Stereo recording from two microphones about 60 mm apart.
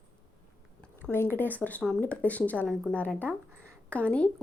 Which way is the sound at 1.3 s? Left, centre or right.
Left.